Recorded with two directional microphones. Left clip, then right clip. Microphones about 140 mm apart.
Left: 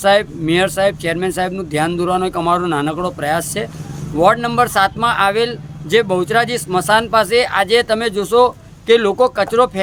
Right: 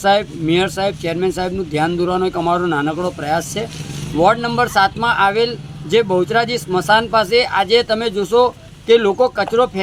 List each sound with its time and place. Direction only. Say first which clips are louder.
0.0 s speech: left 2 dB; 40° left (ahead or behind)